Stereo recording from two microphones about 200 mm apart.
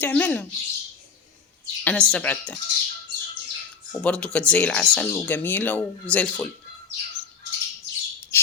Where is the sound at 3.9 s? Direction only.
5° left (ahead or behind).